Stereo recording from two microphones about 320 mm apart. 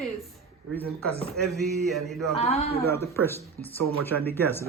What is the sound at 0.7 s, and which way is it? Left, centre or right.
Speech, centre.